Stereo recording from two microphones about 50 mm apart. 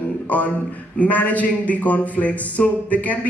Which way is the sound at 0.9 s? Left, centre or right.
Left.